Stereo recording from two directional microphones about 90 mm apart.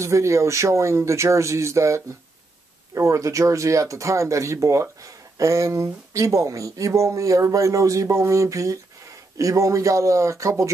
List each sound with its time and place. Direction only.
0.0 s speech: 35° right (ahead or behind)